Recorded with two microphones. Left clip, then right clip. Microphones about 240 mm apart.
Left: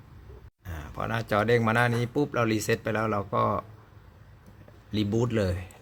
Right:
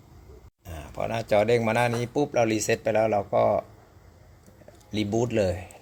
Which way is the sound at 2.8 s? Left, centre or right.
Left.